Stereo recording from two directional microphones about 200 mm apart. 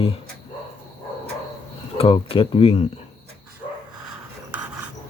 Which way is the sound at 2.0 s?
30° left (ahead or behind).